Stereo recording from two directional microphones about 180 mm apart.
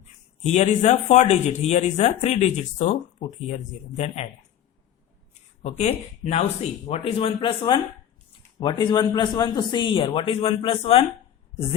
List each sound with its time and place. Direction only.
0.4 s speech: 40° left (ahead or behind)
5.6 s a man's voice: 35° left (ahead or behind)